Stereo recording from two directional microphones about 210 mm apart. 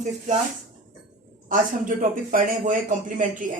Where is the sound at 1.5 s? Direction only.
40° right (ahead or behind).